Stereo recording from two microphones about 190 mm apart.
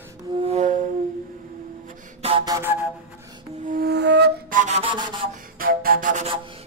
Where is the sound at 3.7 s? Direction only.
55° right (ahead or behind); by 4.9 s 35° right (ahead or behind).